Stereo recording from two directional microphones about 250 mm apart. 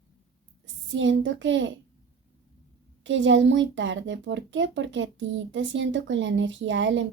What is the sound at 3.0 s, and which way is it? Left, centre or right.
Speech, right.